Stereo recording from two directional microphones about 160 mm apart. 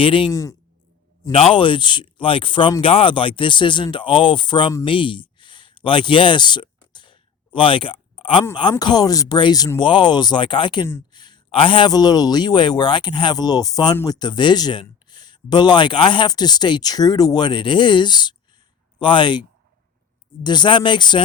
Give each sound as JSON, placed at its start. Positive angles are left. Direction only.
{"t": 0.0, "sound": "speech", "side_deg": 35}
{"t": 0.3, "sound": "speech", "side_deg": 20}
{"t": 1.3, "sound": "speech", "side_deg": 35}
{"t": 5.4, "sound": "a sound", "side_deg": 30}
{"t": 8.8, "sound": "speech", "side_deg": 25}